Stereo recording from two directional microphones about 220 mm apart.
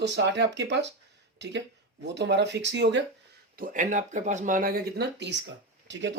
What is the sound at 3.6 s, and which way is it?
Speech, 35° right (ahead or behind).